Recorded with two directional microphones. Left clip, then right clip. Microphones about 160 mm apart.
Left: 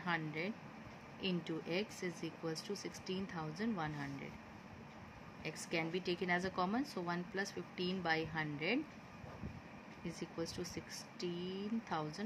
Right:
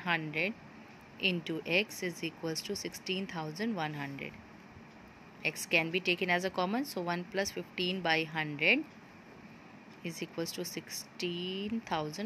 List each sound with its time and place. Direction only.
0.0 s a woman's voice: 25° right (ahead or behind)
5.4 s a woman's voice: 25° right (ahead or behind)
10.0 s a woman's voice: 25° right (ahead or behind)